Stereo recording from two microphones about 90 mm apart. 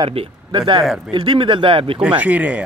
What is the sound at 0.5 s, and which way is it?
Speech, 60° right (ahead or behind).